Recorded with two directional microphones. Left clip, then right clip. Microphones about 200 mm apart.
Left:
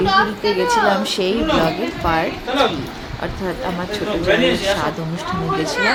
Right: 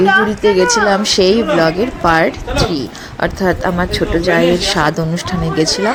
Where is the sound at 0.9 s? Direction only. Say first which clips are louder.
Right 6 dB; 30° right (ahead or behind).